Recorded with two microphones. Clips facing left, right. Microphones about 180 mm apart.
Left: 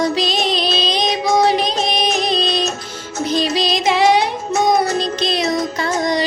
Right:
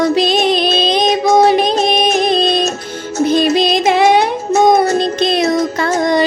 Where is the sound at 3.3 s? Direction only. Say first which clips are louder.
Right 5 dB; 55° right (ahead or behind).